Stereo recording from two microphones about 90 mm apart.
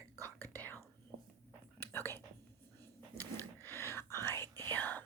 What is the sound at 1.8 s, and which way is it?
Whispering, 25° left (ahead or behind).